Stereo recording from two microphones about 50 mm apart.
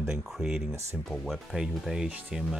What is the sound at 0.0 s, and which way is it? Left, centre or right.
Speech, centre.